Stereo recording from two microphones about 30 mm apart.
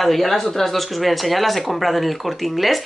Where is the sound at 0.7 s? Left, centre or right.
Centre.